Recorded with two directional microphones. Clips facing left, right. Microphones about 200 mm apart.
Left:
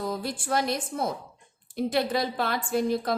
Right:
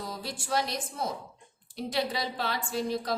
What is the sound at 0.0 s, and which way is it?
A woman's voice, 55° left (ahead or behind).